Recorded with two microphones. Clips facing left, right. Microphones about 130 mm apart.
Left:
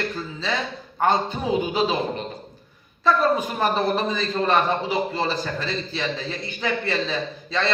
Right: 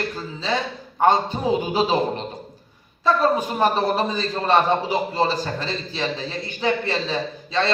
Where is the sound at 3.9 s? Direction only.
40° right (ahead or behind).